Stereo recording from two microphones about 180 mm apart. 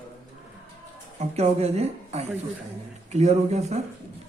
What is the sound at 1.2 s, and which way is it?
Speech, 40° right (ahead or behind).